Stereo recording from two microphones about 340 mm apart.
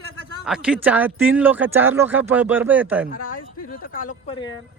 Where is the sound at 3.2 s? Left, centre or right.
Left.